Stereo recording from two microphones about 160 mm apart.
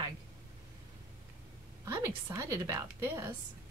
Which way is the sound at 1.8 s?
20° right (ahead or behind).